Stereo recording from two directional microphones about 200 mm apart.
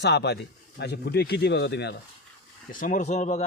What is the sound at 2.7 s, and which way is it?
Speech, 40° left (ahead or behind).